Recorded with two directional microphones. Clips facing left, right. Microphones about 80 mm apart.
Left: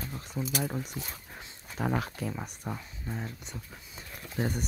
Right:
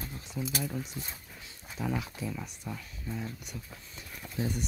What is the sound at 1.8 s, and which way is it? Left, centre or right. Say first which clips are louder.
Speech: left 3 dB; left.